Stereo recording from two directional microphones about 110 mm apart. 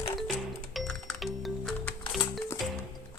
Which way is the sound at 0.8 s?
Centre (ahead or behind).